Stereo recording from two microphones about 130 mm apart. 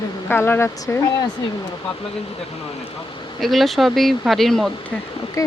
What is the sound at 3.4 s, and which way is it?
Speech, centre (ahead or behind).